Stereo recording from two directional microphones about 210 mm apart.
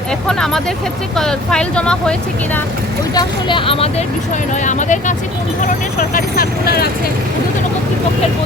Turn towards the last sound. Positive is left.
turn(degrees=45)  # may be behind; listen again after turning